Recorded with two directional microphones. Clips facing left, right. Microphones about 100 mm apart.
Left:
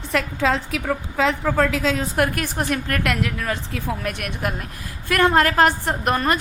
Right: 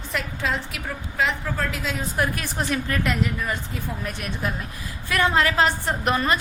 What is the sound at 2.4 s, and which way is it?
A woman's voice, 55° left (ahead or behind).